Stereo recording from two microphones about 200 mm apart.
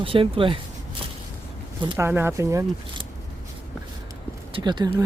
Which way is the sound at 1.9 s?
10° right (ahead or behind).